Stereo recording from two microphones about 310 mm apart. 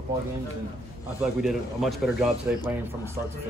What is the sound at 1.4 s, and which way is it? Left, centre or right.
Speech, centre.